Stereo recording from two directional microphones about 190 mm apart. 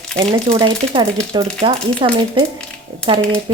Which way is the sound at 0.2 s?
25° right (ahead or behind).